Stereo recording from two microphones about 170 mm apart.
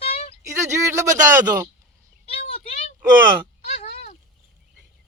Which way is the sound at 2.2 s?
35° left (ahead or behind).